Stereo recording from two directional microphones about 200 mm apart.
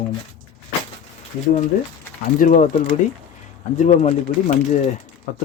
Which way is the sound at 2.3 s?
40° left (ahead or behind).